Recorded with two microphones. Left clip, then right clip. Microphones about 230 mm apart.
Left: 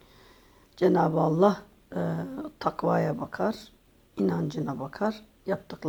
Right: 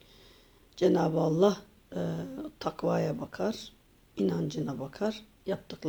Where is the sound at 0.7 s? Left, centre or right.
Centre.